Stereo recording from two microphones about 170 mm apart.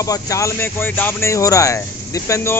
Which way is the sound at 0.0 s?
20° left (ahead or behind).